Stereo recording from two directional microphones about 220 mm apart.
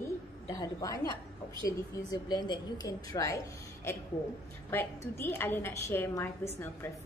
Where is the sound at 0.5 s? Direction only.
15° left (ahead or behind).